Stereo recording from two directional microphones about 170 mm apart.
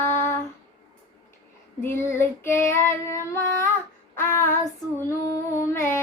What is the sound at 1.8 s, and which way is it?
Child singing, 15° left (ahead or behind).